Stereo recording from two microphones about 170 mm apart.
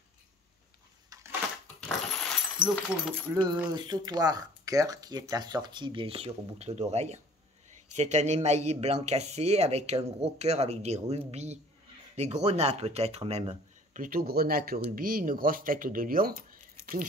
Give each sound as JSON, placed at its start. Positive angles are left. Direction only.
{"t": 1.1, "sound": "a sound", "side_deg": -20}
{"t": 1.8, "sound": "coin", "side_deg": 5}
{"t": 2.7, "sound": "speech", "side_deg": 5}
{"t": 3.7, "sound": "speech", "side_deg": -25}